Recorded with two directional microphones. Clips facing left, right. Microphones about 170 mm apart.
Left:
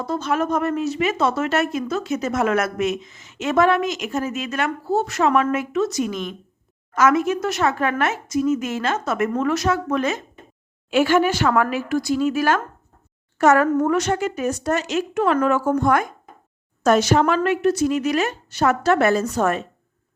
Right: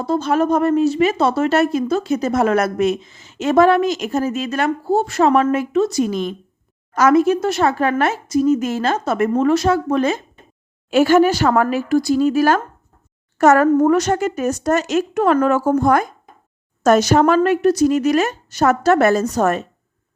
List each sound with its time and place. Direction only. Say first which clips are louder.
0.0 s a woman's voice: right 5 dB; 30° right (ahead or behind)